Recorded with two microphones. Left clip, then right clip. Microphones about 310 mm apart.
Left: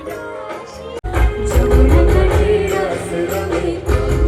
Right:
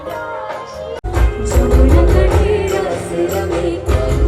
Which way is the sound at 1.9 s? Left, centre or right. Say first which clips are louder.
Right 1 dB; centre.